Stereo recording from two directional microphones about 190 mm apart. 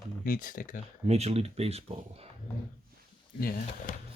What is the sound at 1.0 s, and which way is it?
Speech, 35° right (ahead or behind).